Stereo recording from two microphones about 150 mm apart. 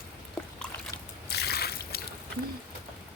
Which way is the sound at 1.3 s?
90° left.